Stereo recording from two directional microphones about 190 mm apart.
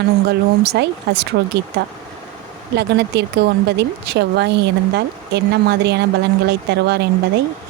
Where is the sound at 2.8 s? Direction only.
60° right (ahead or behind).